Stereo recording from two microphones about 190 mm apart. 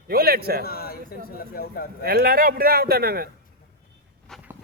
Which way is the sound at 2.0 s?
55° right (ahead or behind).